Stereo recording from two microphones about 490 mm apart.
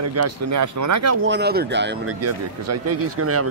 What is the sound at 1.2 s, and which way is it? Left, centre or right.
A man's voice, right.